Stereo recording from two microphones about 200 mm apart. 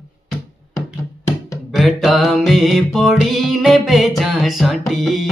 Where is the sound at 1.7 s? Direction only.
Centre (ahead or behind).